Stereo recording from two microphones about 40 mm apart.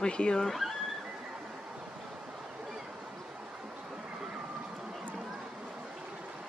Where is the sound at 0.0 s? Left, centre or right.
Left.